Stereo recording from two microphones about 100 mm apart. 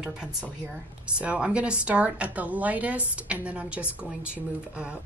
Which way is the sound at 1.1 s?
10° right (ahead or behind).